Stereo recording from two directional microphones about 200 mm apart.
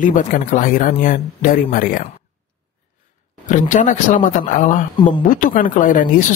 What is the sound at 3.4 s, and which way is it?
Speech, 40° left (ahead or behind).